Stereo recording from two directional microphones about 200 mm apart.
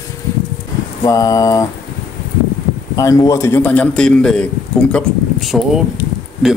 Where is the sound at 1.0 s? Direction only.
15° left (ahead or behind).